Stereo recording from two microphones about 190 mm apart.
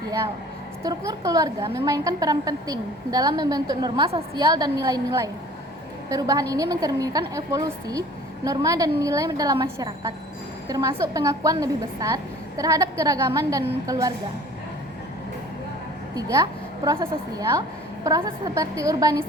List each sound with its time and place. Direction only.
0.8 s a woman's voice: 15° right (ahead or behind)
16.1 s a woman's voice: 15° right (ahead or behind)
17.0 s a woman's voice: 30° right (ahead or behind)